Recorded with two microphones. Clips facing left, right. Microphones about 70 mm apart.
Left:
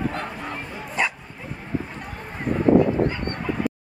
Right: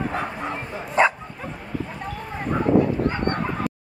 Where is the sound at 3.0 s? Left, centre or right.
Right.